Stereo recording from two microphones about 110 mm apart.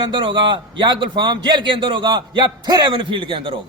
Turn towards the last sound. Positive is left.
turn(degrees=-50)  # may be behind; listen again after turning